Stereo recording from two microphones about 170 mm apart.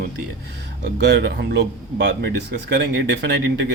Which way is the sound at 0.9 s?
80° right.